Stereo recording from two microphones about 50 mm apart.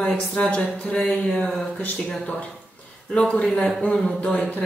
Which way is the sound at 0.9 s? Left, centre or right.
Centre.